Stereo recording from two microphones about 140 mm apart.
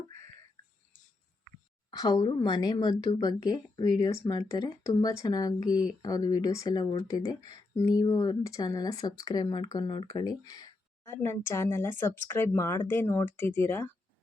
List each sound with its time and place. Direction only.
1.9 s speech: 30° left (ahead or behind)